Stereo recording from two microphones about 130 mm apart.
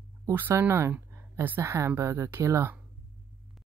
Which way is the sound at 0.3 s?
15° right (ahead or behind).